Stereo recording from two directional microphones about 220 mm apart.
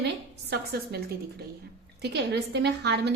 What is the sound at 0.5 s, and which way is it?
A woman's voice, 45° right (ahead or behind).